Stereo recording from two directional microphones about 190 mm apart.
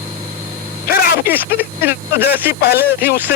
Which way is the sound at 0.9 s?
50° left (ahead or behind).